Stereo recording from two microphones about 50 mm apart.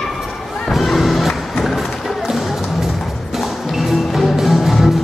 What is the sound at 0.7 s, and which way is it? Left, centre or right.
Music, centre.